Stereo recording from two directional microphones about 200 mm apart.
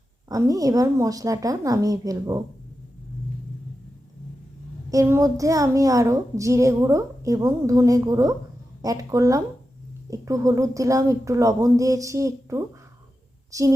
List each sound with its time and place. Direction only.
0.3 s a woman's voice: 15° right (ahead or behind)
4.9 s a woman's voice: 15° right (ahead or behind)